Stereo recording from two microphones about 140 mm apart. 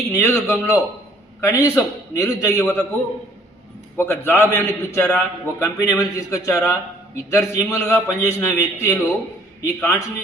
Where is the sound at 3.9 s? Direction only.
15° left (ahead or behind).